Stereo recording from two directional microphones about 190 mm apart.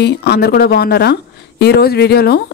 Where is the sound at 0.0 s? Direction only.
55° left (ahead or behind).